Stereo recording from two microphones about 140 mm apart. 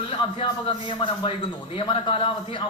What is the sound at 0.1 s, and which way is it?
Speech, 40° left (ahead or behind).